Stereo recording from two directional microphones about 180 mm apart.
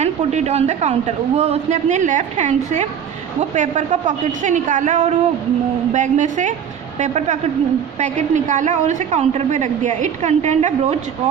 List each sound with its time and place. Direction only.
0.0 s a woman's voice: 40° right (ahead or behind)